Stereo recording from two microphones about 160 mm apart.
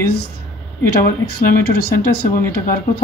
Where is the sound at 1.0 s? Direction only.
75° left (ahead or behind).